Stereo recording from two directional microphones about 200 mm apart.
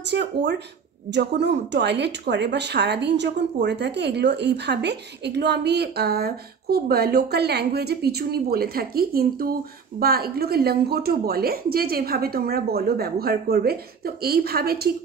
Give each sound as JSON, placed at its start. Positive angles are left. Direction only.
{"t": 0.0, "sound": "a woman's voice", "side_deg": -60}